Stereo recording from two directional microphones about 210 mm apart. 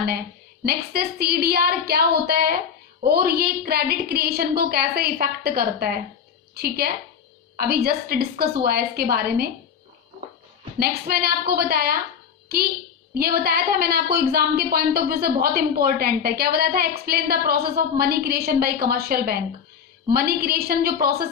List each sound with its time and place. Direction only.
0.7 s a woman's voice: 45° right (ahead or behind)
10.8 s a woman's voice: 45° right (ahead or behind)
13.1 s a woman's voice: 45° right (ahead or behind)